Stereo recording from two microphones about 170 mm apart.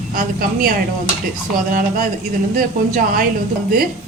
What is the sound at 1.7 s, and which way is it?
A woman's voice, 55° right (ahead or behind).